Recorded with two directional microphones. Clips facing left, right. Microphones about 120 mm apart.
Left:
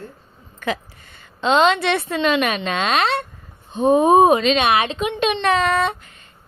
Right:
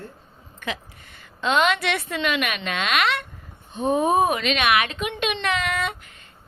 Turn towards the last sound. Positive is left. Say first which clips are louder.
# left 7 dB
turn(degrees=35)  # may be behind; listen again after turning